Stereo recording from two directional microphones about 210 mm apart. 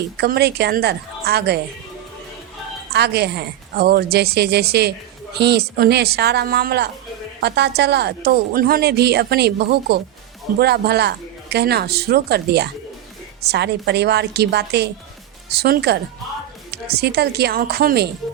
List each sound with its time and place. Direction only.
0.2 s a woman's voice: 50° right (ahead or behind)
2.9 s a woman's voice: 50° right (ahead or behind)